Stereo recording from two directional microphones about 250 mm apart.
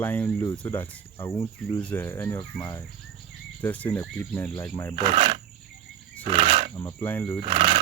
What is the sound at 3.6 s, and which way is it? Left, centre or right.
Speech, centre.